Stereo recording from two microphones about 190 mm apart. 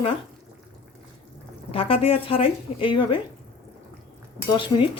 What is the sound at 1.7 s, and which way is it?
A woman's voice, 30° left (ahead or behind).